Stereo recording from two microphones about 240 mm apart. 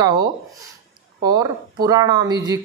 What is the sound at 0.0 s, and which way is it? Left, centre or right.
A man's voice, centre.